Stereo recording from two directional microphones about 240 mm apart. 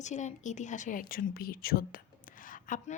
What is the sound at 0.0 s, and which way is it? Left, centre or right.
A woman's voice, left.